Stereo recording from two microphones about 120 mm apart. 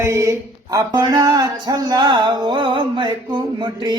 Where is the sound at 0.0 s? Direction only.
25° right (ahead or behind).